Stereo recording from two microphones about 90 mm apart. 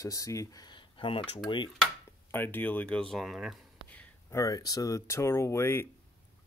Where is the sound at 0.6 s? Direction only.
65° left (ahead or behind).